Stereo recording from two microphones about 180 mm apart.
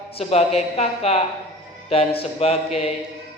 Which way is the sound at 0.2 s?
35° left (ahead or behind).